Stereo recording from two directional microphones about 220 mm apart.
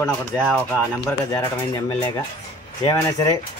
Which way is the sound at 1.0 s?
15° left (ahead or behind).